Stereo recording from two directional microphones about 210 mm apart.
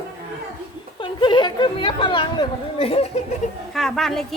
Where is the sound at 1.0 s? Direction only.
20° left (ahead or behind).